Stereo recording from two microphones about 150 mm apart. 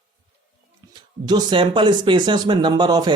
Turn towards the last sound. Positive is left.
turn(degrees=-30)  # may be behind; listen again after turning